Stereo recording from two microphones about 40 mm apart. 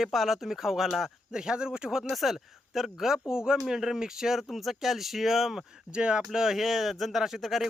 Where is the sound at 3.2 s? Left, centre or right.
Centre.